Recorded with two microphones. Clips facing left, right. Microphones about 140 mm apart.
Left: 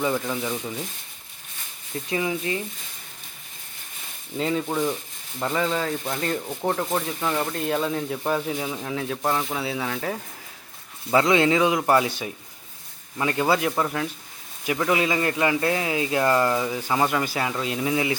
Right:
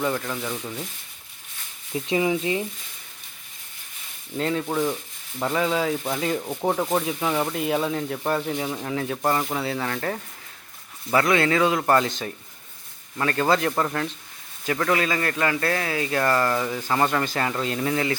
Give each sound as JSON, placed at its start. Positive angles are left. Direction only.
{"t": 0.0, "sound": "speech", "side_deg": 5}
{"t": 2.0, "sound": "speech", "side_deg": -20}
{"t": 4.4, "sound": "speech", "side_deg": 0}
{"t": 11.1, "sound": "speech", "side_deg": 20}